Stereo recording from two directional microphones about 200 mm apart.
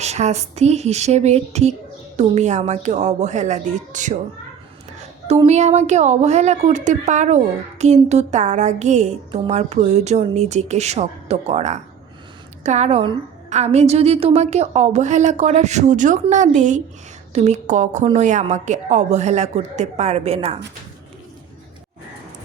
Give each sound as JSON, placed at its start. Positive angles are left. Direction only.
{"t": 0.0, "sound": "speech", "side_deg": -35}
{"t": 5.3, "sound": "speech", "side_deg": -30}